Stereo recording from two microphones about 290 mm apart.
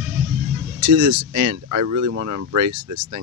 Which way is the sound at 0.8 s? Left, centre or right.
Right.